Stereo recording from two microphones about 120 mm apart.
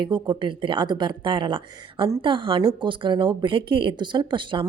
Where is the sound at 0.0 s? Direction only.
40° right (ahead or behind).